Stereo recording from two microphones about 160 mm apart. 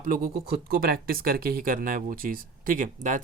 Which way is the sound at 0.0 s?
60° right (ahead or behind).